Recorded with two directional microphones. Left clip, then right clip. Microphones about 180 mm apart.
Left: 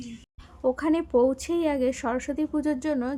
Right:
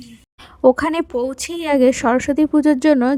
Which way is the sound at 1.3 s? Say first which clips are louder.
Right 7 dB; 65° right (ahead or behind).